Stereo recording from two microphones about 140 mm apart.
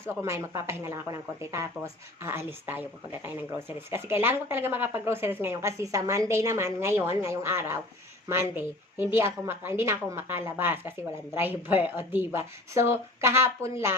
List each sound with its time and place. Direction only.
0.0 s speech: 20° right (ahead or behind)
3.9 s a woman's voice: 15° right (ahead or behind)